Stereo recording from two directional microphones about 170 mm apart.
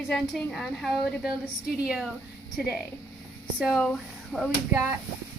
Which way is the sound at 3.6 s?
5° left (ahead or behind).